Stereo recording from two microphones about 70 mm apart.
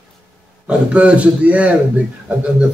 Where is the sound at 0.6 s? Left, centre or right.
Centre.